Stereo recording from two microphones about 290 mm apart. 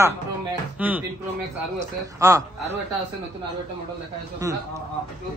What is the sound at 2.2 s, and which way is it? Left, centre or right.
Speech, centre.